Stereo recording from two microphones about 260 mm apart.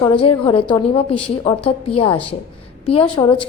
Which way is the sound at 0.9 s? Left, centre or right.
Centre.